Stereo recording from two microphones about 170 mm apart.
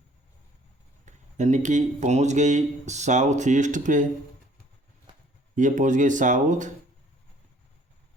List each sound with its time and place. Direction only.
1.0 s speech: 45° right (ahead or behind)
5.5 s speech: 50° right (ahead or behind)